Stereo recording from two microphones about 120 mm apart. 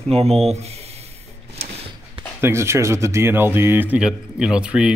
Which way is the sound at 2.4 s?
20° right (ahead or behind).